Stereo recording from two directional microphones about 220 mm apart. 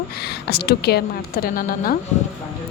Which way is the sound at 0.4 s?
45° left (ahead or behind).